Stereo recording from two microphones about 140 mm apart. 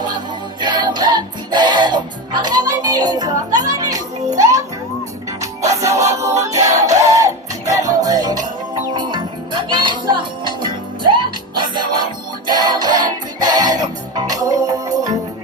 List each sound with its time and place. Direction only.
0.6 s music: 30° right (ahead or behind)